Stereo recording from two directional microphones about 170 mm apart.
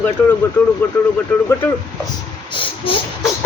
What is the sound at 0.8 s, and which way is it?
Speech, 10° left (ahead or behind).